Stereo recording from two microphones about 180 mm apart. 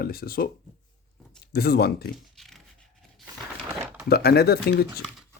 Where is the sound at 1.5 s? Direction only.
60° left (ahead or behind).